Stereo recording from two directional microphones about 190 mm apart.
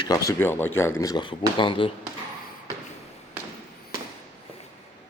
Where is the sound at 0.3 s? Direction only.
10° left (ahead or behind).